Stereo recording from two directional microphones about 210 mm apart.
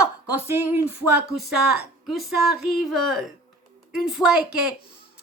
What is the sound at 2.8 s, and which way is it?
A woman's voice, centre (ahead or behind).